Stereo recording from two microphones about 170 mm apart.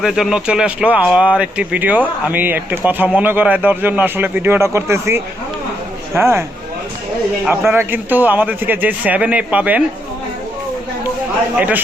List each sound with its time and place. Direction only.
0.0 s speech: centre (ahead or behind)
7.4 s speech: 15° right (ahead or behind)